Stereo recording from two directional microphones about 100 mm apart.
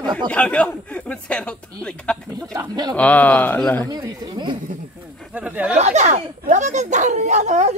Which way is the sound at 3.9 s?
50° right (ahead or behind).